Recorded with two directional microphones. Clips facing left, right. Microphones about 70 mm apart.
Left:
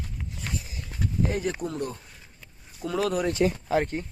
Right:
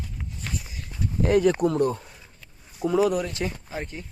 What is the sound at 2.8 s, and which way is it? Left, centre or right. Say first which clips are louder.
Speech: right 6 dB; centre.